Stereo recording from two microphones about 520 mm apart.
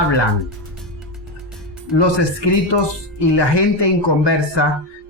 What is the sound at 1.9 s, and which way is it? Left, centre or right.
Speech, left.